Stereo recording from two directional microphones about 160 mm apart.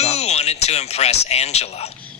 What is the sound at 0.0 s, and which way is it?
Speech, 45° left (ahead or behind).